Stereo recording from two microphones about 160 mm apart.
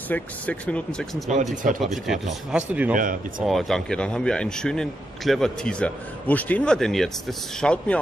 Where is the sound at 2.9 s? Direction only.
55° right (ahead or behind).